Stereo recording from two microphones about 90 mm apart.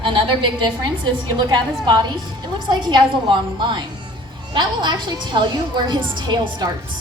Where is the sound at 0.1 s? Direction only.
65° right (ahead or behind).